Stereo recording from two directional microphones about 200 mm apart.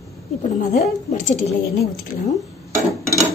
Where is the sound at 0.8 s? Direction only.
35° left (ahead or behind).